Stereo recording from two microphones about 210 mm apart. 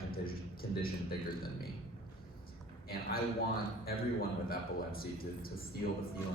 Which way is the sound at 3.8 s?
45° left (ahead or behind).